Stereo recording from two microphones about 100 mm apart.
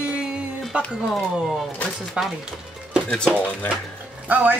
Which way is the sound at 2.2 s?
10° right (ahead or behind).